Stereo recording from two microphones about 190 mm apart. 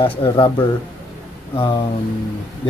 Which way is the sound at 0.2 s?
25° left (ahead or behind).